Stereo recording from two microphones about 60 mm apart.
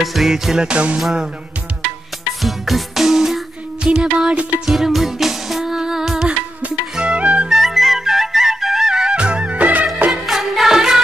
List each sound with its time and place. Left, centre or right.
0.0 s music: centre
2.4 s music: centre
4.6 s music: centre; by 7.4 s right
7.4 s music: centre; by 10.2 s right
10.2 s music: centre